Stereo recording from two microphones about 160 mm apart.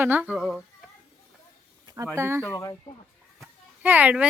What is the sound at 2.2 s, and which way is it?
Speech, 15° right (ahead or behind).